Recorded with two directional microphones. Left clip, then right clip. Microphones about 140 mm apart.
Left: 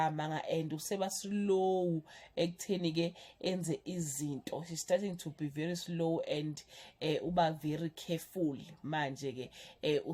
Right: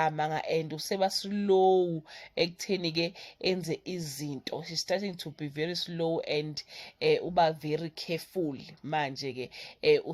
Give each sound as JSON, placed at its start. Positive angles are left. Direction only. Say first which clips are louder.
{"t": 0.0, "sound": "speech", "louder": "right 6 dB", "side_deg": -30}